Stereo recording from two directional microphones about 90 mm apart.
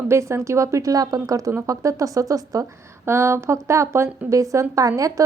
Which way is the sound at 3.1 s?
30° right (ahead or behind).